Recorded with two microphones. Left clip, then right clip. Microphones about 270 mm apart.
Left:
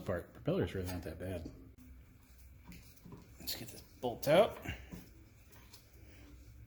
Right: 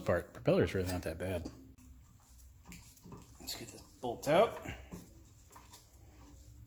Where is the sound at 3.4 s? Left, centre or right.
Left.